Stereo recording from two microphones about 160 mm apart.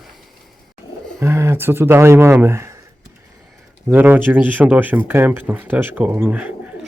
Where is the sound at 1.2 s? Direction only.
15° right (ahead or behind).